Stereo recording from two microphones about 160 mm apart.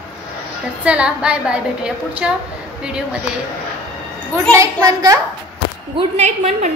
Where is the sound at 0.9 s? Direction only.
5° right (ahead or behind).